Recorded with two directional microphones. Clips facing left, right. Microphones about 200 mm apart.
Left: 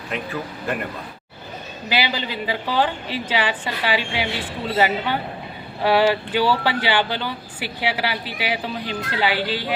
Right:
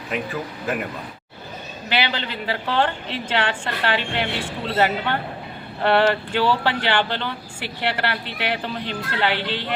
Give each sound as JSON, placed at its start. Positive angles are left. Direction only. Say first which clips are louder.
{"t": 0.1, "sound": "speech", "louder": "right 1 dB", "side_deg": 0}
{"t": 1.9, "sound": "speech", "louder": "left 1 dB", "side_deg": 5}